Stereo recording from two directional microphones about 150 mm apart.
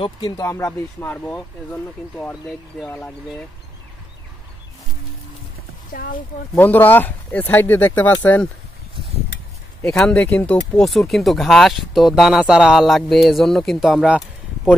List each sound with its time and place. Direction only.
0.0 s speech: 30° left (ahead or behind)
0.5 s speech: 20° left (ahead or behind)
5.9 s speech: 70° left (ahead or behind)
6.5 s speech: 10° left (ahead or behind)
9.8 s speech: 5° left (ahead or behind)